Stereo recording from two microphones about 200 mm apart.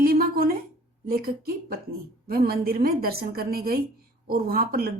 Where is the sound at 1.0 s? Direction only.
50° right (ahead or behind).